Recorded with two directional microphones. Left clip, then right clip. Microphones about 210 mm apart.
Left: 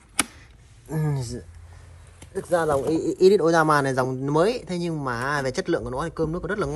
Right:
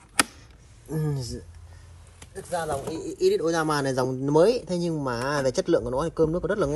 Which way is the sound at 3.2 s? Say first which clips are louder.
Left 5 dB; 5° left (ahead or behind).